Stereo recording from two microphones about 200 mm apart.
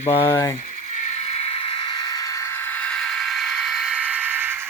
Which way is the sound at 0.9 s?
35° left (ahead or behind).